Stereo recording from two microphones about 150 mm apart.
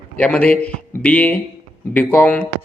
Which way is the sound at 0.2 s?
10° left (ahead or behind).